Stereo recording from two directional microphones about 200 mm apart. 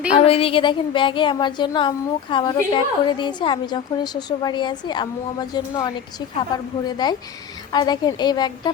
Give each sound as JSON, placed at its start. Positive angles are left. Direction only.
{"t": 0.1, "sound": "a woman's voice", "side_deg": 30}